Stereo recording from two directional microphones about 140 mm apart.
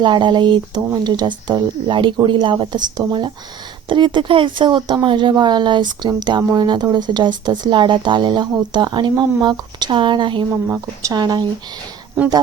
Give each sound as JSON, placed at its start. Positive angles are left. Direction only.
{"t": 0.0, "sound": "speech", "side_deg": -35}
{"t": 10.5, "sound": "speech", "side_deg": -20}
{"t": 11.2, "sound": "speech", "side_deg": -30}